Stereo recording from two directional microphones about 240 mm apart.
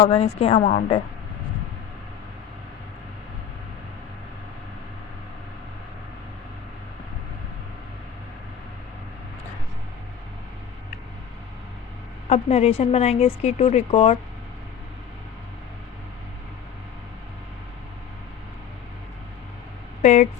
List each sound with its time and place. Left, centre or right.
0.0 s a woman's voice: left
12.3 s a woman's voice: left
20.0 s speech: left